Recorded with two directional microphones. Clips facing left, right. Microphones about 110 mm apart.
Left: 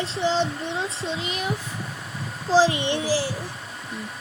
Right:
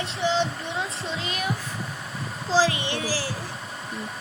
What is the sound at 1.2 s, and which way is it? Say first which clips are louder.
Speech: left 1 dB; 25° left (ahead or behind).